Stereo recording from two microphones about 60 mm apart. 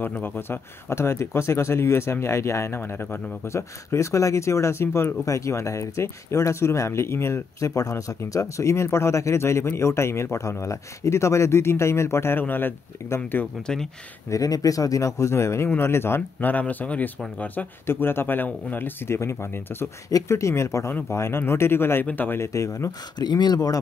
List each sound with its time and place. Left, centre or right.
0.1 s speech: left
2.8 s speech: left
3.4 s speech: left
5.2 s speech: left
7.7 s speech: left
13.7 s speech: centre
14.3 s speech: left
16.4 s speech: left
17.8 s speech: left
19.1 s speech: left
20.2 s speech: left
22.4 s speech: left